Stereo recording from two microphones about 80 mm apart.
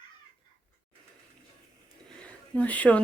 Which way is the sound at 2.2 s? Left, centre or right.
Centre.